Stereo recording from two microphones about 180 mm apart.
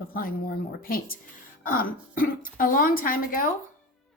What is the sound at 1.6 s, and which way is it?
Speech, 50° left (ahead or behind).